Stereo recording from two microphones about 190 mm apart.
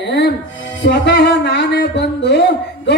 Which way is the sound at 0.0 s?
65° left (ahead or behind).